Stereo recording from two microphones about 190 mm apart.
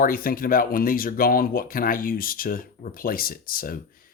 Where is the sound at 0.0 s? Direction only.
50° left (ahead or behind).